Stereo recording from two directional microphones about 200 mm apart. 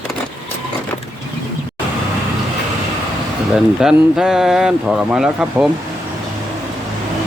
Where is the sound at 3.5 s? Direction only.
5° right (ahead or behind).